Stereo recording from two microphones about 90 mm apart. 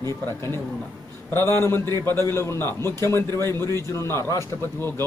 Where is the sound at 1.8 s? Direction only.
45° right (ahead or behind).